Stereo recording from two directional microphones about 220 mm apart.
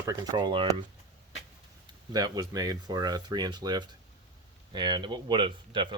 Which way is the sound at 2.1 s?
15° right (ahead or behind).